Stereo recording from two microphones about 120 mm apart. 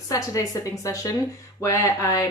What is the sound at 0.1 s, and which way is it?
Speech, 25° left (ahead or behind).